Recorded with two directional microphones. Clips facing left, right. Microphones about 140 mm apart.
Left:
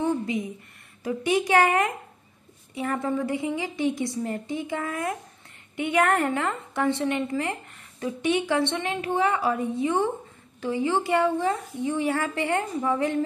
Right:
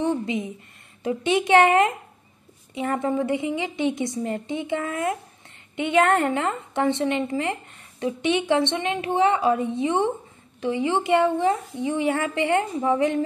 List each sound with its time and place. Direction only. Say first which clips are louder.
0.0 s a woman's voice: right 1 dB; 25° right (ahead or behind)